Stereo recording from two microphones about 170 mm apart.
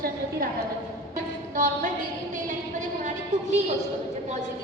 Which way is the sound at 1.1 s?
50° right (ahead or behind).